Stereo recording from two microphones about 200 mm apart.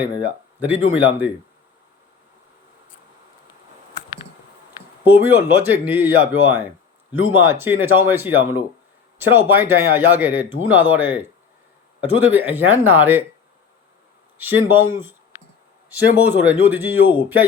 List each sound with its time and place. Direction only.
0.6 s speech: 10° right (ahead or behind)
5.0 s speech: 10° right (ahead or behind)
14.3 s speech: 10° right (ahead or behind)
16.2 s speech: 10° right (ahead or behind)